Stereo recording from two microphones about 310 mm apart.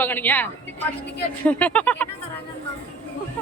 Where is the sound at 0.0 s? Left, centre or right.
Centre.